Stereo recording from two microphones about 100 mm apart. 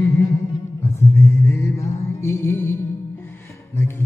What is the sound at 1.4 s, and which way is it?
Music, 30° left (ahead or behind).